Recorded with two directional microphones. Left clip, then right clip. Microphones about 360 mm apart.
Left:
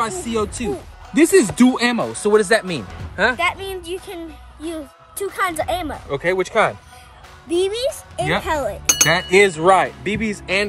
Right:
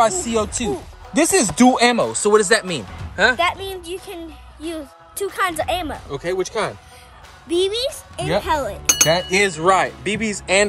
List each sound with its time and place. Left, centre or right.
0.0 s speech: centre